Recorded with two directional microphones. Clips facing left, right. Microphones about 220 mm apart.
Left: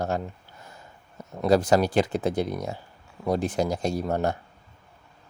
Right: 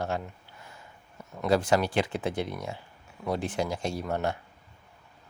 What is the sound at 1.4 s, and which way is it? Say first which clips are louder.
Speech: left 4 dB; 40° left (ahead or behind).